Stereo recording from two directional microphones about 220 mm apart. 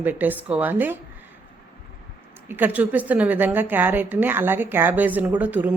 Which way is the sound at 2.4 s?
10° right (ahead or behind).